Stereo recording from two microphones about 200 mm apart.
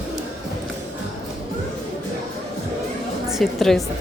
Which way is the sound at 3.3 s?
Centre (ahead or behind).